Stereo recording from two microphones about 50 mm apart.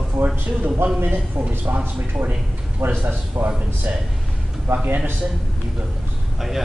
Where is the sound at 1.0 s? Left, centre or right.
Right.